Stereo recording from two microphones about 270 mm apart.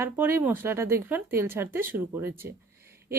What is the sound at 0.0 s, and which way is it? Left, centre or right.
Speech, centre.